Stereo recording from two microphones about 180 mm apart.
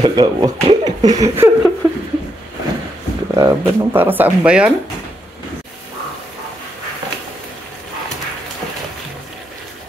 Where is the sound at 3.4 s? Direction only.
15° right (ahead or behind).